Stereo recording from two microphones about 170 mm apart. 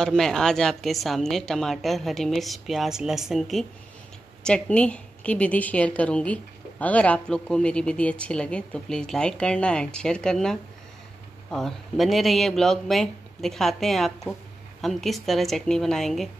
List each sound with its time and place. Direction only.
0.0 s a woman's voice: 5° left (ahead or behind)